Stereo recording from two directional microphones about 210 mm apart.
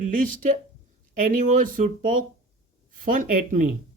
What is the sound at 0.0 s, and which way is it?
Speech, 40° right (ahead or behind).